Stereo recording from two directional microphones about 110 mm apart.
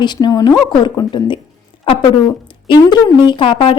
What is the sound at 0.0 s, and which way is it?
A woman's voice, 40° left (ahead or behind).